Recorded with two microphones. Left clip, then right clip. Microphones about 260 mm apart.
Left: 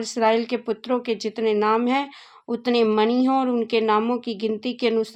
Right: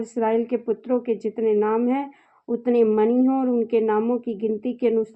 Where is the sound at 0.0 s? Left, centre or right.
Centre.